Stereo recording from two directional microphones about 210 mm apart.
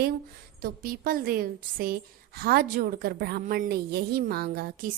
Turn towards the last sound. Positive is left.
turn(degrees=-50)  # may be behind; listen again after turning